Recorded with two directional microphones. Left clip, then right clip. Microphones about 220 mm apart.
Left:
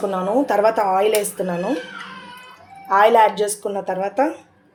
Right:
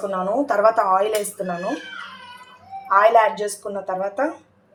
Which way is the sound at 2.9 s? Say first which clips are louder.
Left 1 dB; 25° left (ahead or behind).